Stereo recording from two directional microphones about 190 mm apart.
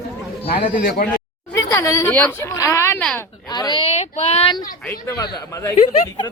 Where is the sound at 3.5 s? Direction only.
20° left (ahead or behind).